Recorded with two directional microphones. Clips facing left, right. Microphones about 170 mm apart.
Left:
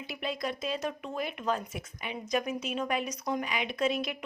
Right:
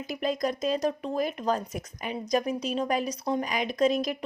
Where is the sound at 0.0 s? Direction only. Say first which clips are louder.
Right 6 dB; 40° right (ahead or behind).